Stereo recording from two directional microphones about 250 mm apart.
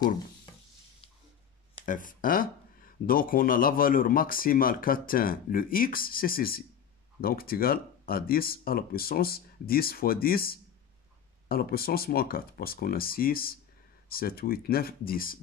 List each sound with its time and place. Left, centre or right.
1.9 s speech: left